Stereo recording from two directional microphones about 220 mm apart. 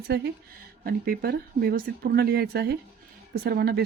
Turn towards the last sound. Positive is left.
turn(degrees=-45)  # may be behind; listen again after turning